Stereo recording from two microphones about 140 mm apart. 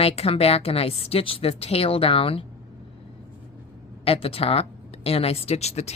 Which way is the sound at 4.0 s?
45° left (ahead or behind).